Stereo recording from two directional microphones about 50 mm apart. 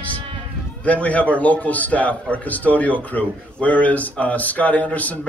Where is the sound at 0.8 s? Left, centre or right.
Left.